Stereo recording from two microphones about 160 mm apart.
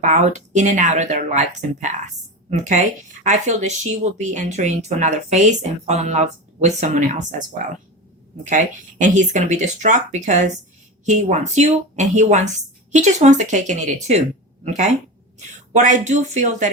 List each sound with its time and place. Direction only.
0.0 s speech: 50° right (ahead or behind)
8.4 s speech: 50° right (ahead or behind)